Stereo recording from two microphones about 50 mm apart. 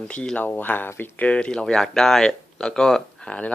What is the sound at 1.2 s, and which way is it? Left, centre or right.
Speech, left.